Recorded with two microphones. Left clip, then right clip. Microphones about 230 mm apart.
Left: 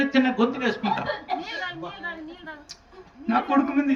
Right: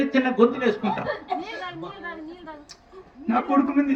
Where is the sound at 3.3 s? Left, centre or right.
Left.